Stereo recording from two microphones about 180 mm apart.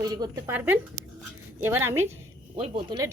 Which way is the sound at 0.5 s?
10° right (ahead or behind).